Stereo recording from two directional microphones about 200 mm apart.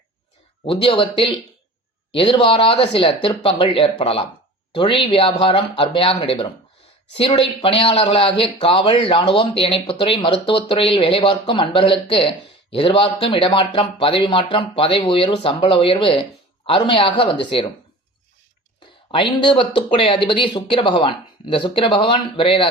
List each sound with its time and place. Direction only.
0.6 s speech: 25° left (ahead or behind)
19.1 s speech: 25° left (ahead or behind)